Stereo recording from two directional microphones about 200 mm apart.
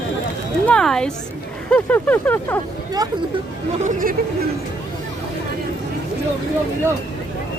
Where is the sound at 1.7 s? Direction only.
10° left (ahead or behind).